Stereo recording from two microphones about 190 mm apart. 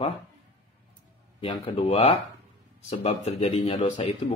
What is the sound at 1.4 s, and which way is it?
Speech, 25° left (ahead or behind).